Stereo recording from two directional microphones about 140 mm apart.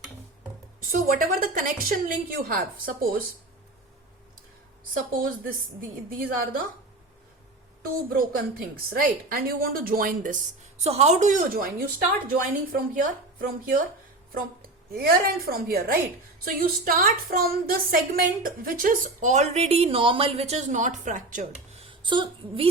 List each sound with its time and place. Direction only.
0.9 s a woman's voice: 80° right
5.1 s a woman's voice: 90° right
7.8 s a woman's voice: 90° right
10.8 s a woman's voice: 50° right (ahead or behind); by 13.8 s 75° right (ahead or behind)
14.3 s a woman's voice: 90° right; by 21.4 s 65° right (ahead or behind)
21.8 s speech: 40° right (ahead or behind)